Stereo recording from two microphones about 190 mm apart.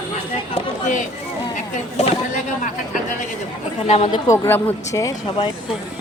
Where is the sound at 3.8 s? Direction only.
35° left (ahead or behind).